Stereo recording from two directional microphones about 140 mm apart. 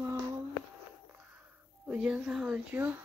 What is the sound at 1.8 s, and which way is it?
Speech, 10° right (ahead or behind).